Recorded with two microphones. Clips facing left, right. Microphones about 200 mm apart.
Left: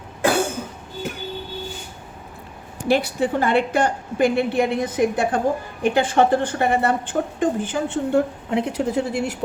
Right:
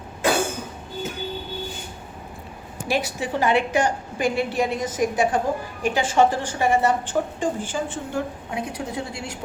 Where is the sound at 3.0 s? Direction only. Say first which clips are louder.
Left 3 dB; 55° left (ahead or behind).